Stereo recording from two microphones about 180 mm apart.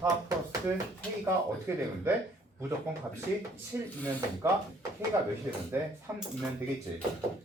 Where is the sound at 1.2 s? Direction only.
15° right (ahead or behind).